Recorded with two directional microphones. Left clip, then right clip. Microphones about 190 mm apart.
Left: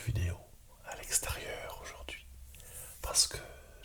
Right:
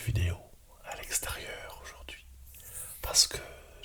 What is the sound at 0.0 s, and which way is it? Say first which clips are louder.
Whispering: right 4 dB; 10° right (ahead or behind).